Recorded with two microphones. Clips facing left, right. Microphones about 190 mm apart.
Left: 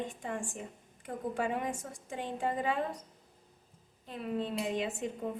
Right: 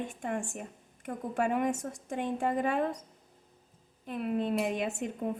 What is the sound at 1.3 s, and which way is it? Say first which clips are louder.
A woman's voice: right 6 dB; 45° right (ahead or behind).